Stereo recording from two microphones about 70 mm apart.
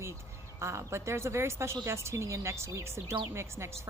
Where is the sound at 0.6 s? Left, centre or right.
Right.